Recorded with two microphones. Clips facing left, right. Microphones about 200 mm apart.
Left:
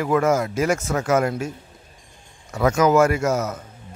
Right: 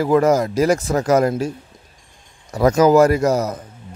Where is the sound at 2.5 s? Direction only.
35° right (ahead or behind).